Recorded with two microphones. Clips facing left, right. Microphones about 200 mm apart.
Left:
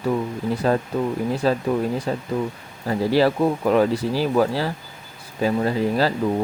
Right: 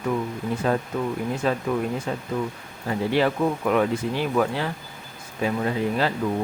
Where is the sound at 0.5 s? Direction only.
35° left (ahead or behind).